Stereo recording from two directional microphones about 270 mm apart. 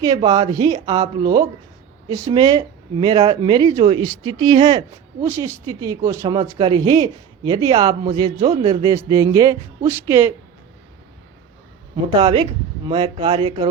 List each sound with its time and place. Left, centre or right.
0.0 s speech: centre
12.1 s speech: centre